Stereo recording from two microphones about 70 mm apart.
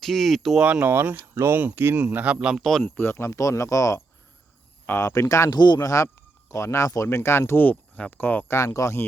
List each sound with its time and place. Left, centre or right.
0.0 s speech: centre
0.6 s speech: right
2.0 s a man's voice: centre
2.6 s speech: centre
3.0 s speech: left
5.5 s speech: left
5.8 s speech: left
7.1 s speech: left
8.4 s speech: left